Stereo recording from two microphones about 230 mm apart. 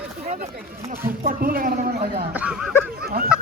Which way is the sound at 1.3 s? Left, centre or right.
Right.